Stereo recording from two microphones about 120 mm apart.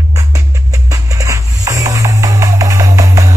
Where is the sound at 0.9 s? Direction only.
25° right (ahead or behind).